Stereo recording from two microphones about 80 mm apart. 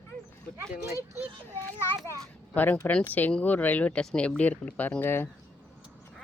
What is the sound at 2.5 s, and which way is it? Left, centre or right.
Speech, left.